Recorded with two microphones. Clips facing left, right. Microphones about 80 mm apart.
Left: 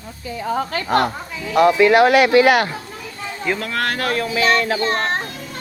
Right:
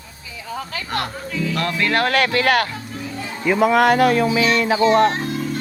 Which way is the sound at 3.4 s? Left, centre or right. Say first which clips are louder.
Right 8 dB; centre.